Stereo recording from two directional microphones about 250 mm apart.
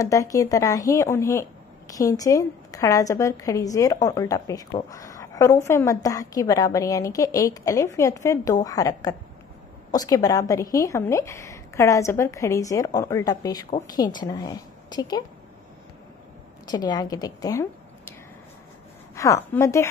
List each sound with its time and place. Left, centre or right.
0.0 s a woman's voice: centre
16.6 s a woman's voice: centre
19.1 s a woman's voice: centre